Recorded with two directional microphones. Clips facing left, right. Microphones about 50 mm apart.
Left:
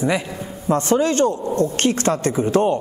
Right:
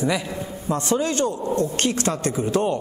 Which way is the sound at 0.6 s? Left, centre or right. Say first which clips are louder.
Left 5 dB; left.